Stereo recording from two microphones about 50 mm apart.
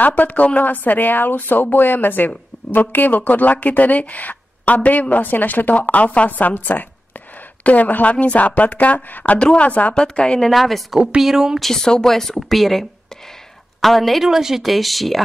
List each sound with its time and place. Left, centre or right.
0.0 s a woman's voice: left
9.9 s a woman's voice: centre
10.4 s a woman's voice: centre
11.6 s a woman's voice: centre
14.2 s a woman's voice: centre